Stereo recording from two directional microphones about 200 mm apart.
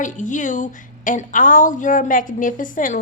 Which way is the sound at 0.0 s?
40° left (ahead or behind).